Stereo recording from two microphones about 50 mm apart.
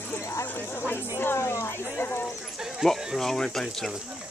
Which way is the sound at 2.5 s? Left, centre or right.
Centre.